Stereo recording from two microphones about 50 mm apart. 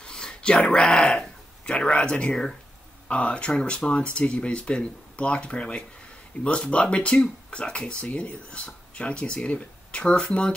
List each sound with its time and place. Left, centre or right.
0.0 s speech: centre